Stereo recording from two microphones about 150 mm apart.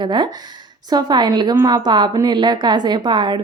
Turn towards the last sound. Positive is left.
turn(degrees=-30)  # may be behind; listen again after turning